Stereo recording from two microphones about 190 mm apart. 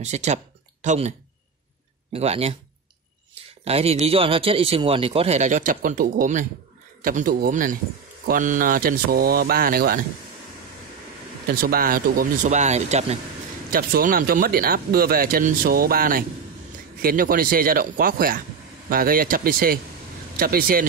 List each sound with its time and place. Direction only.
0.0 s speech: 35° right (ahead or behind)
2.1 s speech: 35° right (ahead or behind)
3.6 s speech: 30° right (ahead or behind); by 10.0 s 50° right (ahead or behind)
11.4 s speech: 50° right (ahead or behind); by 13.2 s 35° right (ahead or behind)
13.7 s speech: 50° right (ahead or behind)